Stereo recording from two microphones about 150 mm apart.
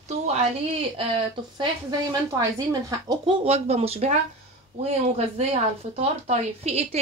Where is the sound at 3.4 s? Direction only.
45° right (ahead or behind).